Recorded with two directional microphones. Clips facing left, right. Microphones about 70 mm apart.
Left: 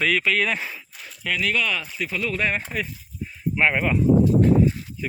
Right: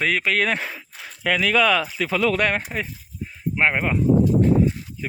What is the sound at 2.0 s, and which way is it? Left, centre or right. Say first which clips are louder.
Speech: right 5 dB; right.